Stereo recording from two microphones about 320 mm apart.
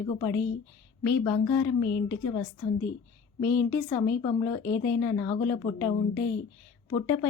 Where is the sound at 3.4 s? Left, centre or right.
Left.